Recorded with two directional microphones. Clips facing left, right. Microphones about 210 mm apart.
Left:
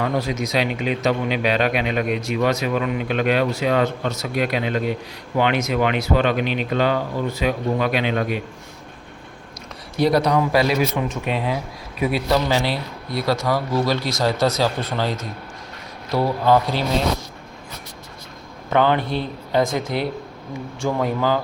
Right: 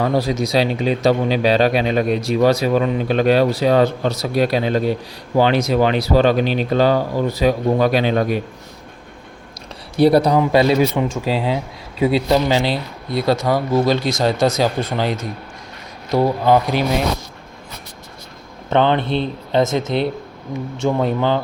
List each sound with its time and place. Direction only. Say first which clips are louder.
0.0 s speech: right 4 dB; 35° right (ahead or behind)
10.0 s speech: right 5 dB; 30° right (ahead or behind)
14.3 s speech: right 3 dB; 45° right (ahead or behind)
14.8 s speech: right 3 dB; 15° right (ahead or behind)
18.7 s speech: right 2 dB; 25° right (ahead or behind)